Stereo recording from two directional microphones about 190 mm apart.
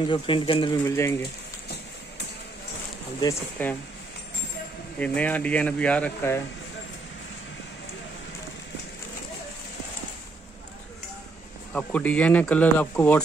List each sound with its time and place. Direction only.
0.0 s speech: 25° left (ahead or behind)
0.8 s speech: 15° left (ahead or behind)
3.2 s speech: 15° left (ahead or behind)
4.9 s speech: 5° left (ahead or behind)
11.7 s speech: 5° left (ahead or behind)